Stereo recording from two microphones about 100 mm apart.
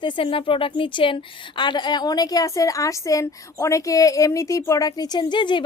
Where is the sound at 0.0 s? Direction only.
60° left (ahead or behind).